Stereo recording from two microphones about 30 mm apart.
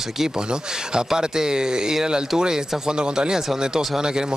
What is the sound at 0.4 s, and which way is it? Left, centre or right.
Speech, right.